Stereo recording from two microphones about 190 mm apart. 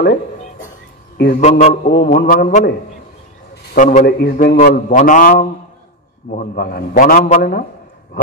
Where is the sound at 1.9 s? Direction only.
55° left (ahead or behind).